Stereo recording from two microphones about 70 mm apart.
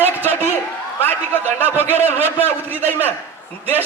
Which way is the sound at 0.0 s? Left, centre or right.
Left.